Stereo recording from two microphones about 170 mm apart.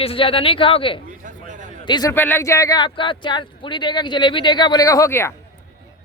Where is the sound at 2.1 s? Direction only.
15° left (ahead or behind).